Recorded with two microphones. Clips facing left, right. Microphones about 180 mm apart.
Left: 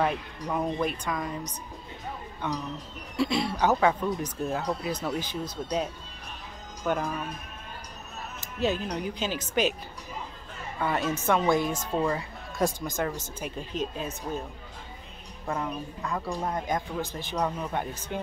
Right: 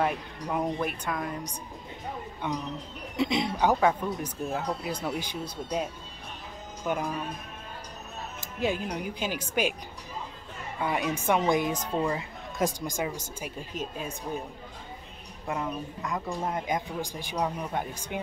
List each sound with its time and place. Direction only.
0.6 s a woman's voice: 10° right (ahead or behind)
3.2 s a woman's voice: 20° right (ahead or behind)
8.5 s a woman's voice: 10° right (ahead or behind)
10.8 s a woman's voice: 10° right (ahead or behind)
15.4 s a woman's voice: 15° right (ahead or behind)